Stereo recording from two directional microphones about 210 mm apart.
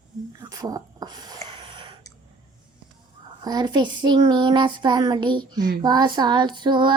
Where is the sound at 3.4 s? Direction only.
20° right (ahead or behind).